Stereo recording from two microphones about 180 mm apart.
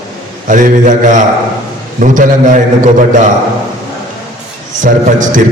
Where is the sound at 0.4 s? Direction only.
45° right (ahead or behind).